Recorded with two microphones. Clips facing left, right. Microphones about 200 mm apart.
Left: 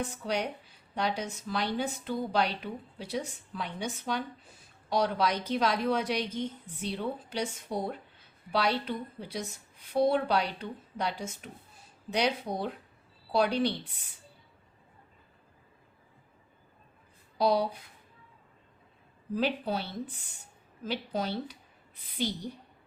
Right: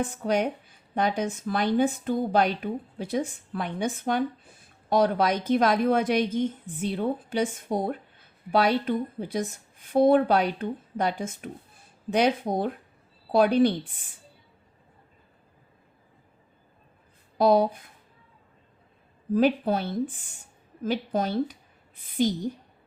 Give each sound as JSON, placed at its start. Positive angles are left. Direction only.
{"t": 0.0, "sound": "a woman's voice", "side_deg": -50}
{"t": 17.3, "sound": "a woman's voice", "side_deg": -50}
{"t": 19.3, "sound": "a woman's voice", "side_deg": -50}